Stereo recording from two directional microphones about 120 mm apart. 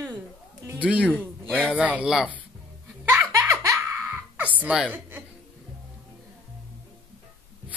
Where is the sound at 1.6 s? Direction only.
10° right (ahead or behind).